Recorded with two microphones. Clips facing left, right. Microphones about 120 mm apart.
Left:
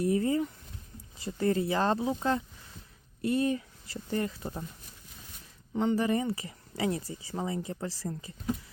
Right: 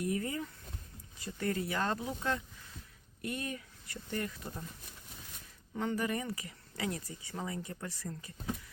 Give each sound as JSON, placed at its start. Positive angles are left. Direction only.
{"t": 0.0, "sound": "speech", "side_deg": 30}
{"t": 5.7, "sound": "speech", "side_deg": 25}